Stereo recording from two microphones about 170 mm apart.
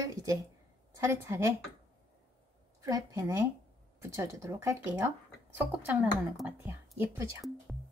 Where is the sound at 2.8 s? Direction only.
20° right (ahead or behind).